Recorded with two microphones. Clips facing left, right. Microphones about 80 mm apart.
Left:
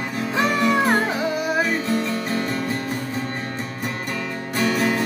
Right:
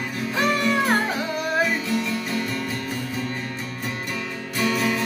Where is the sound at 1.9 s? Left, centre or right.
Left.